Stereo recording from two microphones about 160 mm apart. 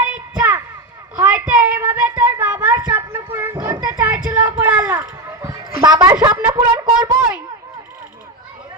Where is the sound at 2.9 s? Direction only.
15° right (ahead or behind).